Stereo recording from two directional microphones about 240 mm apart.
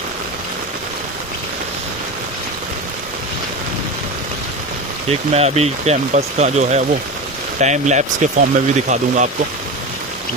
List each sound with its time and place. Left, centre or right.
5.3 s speech: right